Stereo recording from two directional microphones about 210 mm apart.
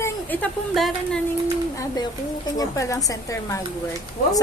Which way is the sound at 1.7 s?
20° left (ahead or behind).